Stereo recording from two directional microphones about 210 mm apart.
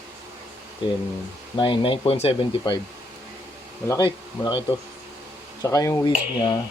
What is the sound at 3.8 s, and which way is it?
Speech, 20° left (ahead or behind).